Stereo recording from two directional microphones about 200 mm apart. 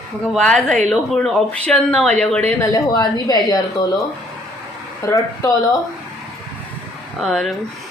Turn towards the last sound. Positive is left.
turn(degrees=0)  # may be behind; listen again after turning